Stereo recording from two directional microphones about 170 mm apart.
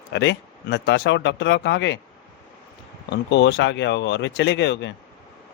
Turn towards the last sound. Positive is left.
turn(degrees=90)